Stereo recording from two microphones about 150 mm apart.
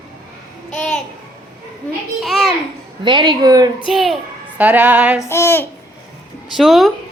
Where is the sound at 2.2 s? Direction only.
Centre (ahead or behind).